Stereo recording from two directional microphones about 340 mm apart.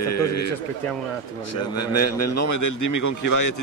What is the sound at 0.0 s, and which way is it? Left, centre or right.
Speech, left.